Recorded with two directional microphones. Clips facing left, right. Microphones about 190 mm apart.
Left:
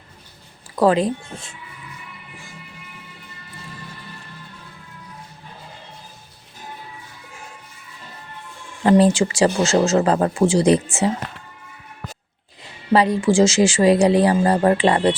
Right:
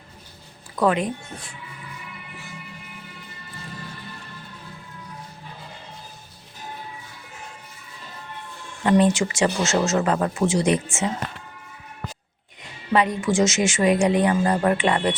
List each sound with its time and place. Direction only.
0.8 s speech: 30° left (ahead or behind)
8.8 s speech: 35° left (ahead or behind)
12.9 s speech: 35° left (ahead or behind)